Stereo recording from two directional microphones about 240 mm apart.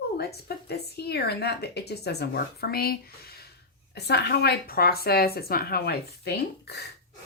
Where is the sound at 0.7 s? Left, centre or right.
Left.